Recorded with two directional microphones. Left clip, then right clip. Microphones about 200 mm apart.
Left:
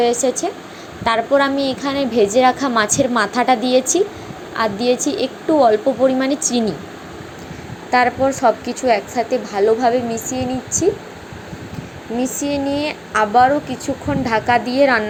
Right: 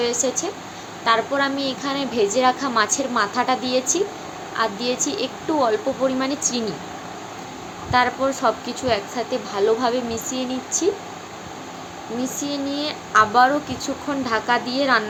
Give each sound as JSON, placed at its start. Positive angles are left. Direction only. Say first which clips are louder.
{"t": 0.0, "sound": "a woman's voice", "louder": "left 6 dB", "side_deg": 25}
{"t": 7.9, "sound": "a woman's voice", "louder": "left 4 dB", "side_deg": 20}
{"t": 12.2, "sound": "a woman's voice", "louder": "left 6 dB", "side_deg": 20}